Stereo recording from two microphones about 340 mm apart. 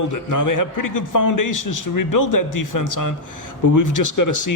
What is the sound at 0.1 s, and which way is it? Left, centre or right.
A man's voice, left.